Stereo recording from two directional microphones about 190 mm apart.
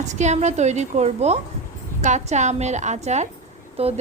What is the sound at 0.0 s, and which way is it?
A woman's voice, 40° right (ahead or behind).